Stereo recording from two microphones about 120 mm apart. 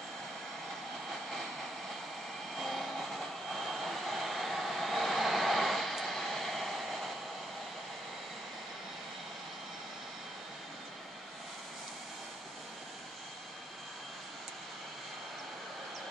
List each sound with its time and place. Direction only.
2.5 s vehicle: centre (ahead or behind)